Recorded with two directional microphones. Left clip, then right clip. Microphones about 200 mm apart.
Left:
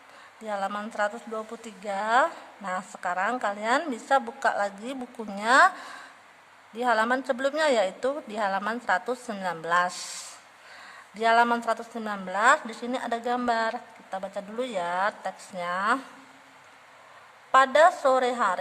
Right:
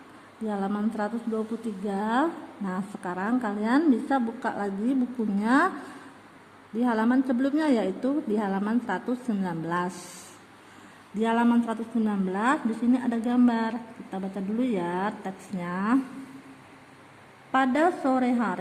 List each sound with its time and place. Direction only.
0.4 s a woman's voice: 35° left (ahead or behind)
6.7 s a woman's voice: 35° left (ahead or behind)
11.2 s a woman's voice: 35° left (ahead or behind)
17.5 s a woman's voice: 30° left (ahead or behind)